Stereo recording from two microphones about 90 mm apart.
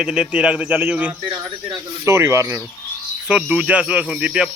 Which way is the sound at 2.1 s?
30° right (ahead or behind).